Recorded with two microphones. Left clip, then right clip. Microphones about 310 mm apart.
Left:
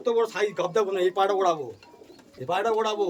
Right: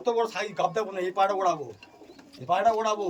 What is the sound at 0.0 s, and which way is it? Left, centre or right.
A man's voice, centre.